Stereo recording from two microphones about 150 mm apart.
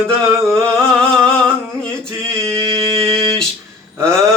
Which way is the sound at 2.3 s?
Centre (ahead or behind).